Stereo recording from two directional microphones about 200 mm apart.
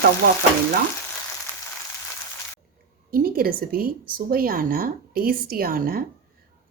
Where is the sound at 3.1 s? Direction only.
45° right (ahead or behind).